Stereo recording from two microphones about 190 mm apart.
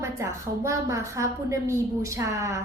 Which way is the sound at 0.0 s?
15° right (ahead or behind).